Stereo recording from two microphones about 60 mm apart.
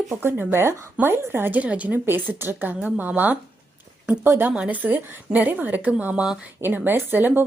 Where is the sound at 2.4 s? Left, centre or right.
Right.